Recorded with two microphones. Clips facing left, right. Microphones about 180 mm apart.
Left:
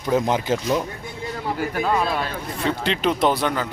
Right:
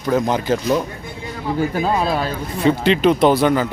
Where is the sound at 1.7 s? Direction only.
30° right (ahead or behind).